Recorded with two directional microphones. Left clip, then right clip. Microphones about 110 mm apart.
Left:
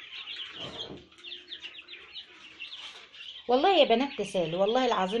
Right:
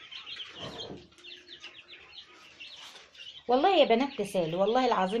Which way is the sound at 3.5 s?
15° left (ahead or behind).